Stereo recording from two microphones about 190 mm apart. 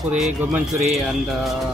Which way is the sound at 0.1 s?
5° right (ahead or behind).